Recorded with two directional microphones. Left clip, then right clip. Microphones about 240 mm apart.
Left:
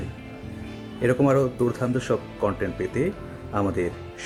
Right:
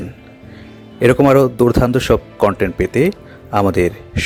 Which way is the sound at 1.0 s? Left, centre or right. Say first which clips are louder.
Right 10 dB; right.